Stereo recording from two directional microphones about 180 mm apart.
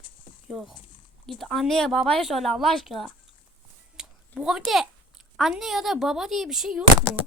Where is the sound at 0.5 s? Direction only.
Centre (ahead or behind).